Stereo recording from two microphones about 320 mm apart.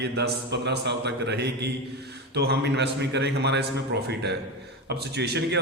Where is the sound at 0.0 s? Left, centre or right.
Right.